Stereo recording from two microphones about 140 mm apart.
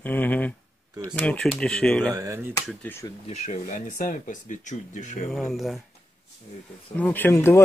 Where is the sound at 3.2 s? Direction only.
55° left (ahead or behind).